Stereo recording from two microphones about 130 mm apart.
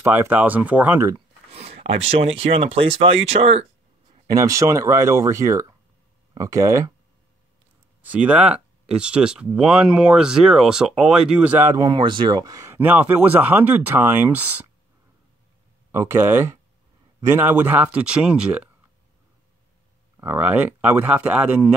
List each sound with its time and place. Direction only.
0.0 s speech: 15° right (ahead or behind)
1.5 s speech: 50° right (ahead or behind)
4.3 s speech: 25° right (ahead or behind)
8.0 s speech: 10° right (ahead or behind)
11.8 s speech: 35° right (ahead or behind); by 14.7 s 10° right (ahead or behind)
15.9 s speech: 20° right (ahead or behind)
20.2 s speech: 15° right (ahead or behind)